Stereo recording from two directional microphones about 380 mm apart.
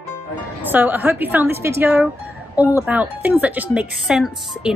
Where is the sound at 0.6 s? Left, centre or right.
Centre.